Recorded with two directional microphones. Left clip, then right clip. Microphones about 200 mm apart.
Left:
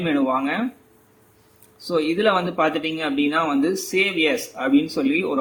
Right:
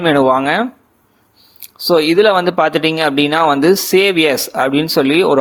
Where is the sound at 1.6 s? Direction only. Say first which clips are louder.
Right 10 dB; 45° right (ahead or behind).